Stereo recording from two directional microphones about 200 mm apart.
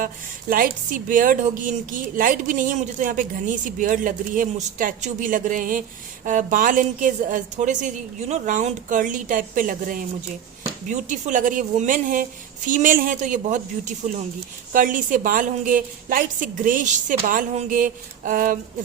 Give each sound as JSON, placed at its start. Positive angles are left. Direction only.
{"t": 0.5, "sound": "a woman's voice", "side_deg": -45}